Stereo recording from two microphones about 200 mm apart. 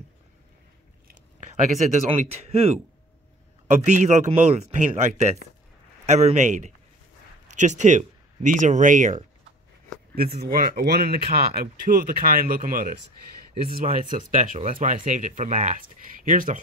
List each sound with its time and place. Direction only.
1.0 s a sound: 35° right (ahead or behind)
3.8 s speech: 35° right (ahead or behind)
10.1 s speech: 50° right (ahead or behind)